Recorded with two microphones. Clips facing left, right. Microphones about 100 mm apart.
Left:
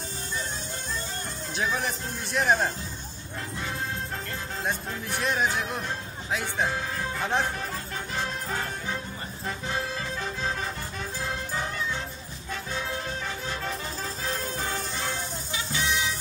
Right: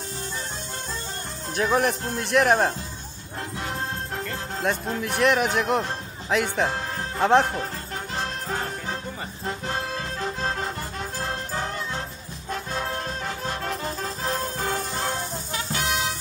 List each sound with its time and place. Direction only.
1.5 s speech: 55° right (ahead or behind)
4.6 s speech: 65° right (ahead or behind)
11.5 s music: 35° right (ahead or behind)
12.4 s music: 50° right (ahead or behind)
15.9 s music: 70° right (ahead or behind)